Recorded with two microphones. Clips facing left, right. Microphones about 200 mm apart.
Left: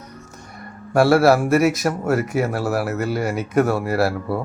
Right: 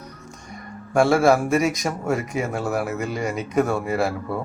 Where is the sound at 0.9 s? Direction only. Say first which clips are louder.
Left 2 dB; 5° left (ahead or behind).